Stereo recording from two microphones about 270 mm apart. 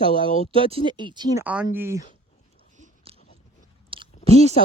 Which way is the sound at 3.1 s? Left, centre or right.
Right.